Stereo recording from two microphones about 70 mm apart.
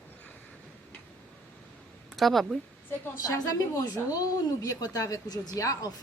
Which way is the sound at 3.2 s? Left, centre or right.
Left.